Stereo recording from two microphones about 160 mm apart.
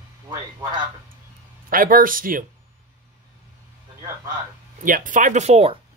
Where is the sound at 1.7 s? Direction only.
60° right (ahead or behind).